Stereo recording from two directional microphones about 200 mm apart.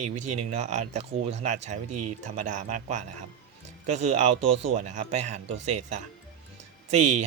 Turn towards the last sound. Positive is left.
turn(degrees=-35)  # may be behind; listen again after turning